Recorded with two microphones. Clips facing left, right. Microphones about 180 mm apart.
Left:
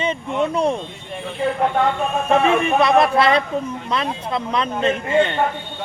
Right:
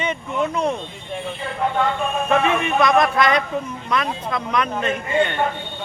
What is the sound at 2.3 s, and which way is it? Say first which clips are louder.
Speech: left 3 dB; 35° left (ahead or behind).